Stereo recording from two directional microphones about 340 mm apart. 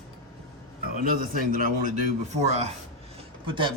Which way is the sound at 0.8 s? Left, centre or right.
Right.